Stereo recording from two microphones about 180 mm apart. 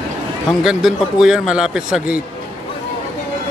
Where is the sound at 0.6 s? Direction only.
5° right (ahead or behind).